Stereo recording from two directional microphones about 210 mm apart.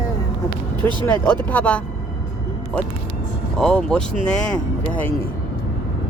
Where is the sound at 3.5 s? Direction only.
5° left (ahead or behind).